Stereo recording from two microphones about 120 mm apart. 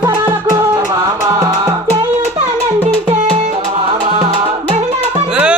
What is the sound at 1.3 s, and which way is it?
Music, 20° right (ahead or behind).